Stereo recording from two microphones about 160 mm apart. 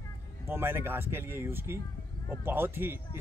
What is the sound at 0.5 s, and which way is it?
Speech, 15° right (ahead or behind).